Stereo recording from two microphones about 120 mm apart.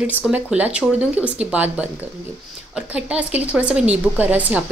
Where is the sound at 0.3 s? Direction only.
10° right (ahead or behind).